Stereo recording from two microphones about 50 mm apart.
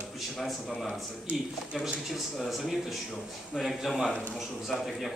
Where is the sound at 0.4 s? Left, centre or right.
Centre.